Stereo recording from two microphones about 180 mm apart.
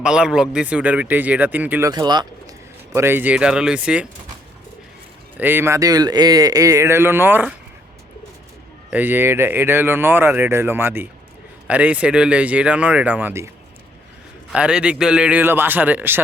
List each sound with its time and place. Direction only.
0.0 s speech: 5° right (ahead or behind)
1.9 s speech: 25° right (ahead or behind)
2.9 s speech: 15° right (ahead or behind)
5.4 s speech: 10° right (ahead or behind)
8.9 s speech: 10° right (ahead or behind)
14.5 s speech: 5° right (ahead or behind)